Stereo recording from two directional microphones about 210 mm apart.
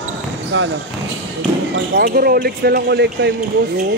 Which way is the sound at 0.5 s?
60° right (ahead or behind).